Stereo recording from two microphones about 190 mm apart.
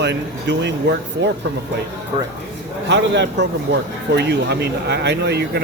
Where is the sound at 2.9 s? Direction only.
65° right (ahead or behind).